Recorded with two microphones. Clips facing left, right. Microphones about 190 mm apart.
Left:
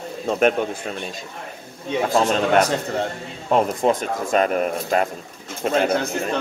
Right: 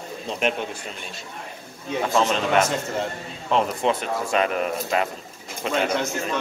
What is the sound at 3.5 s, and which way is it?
Speech, 45° left (ahead or behind).